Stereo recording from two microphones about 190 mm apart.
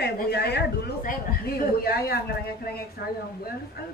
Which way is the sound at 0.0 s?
60° left (ahead or behind).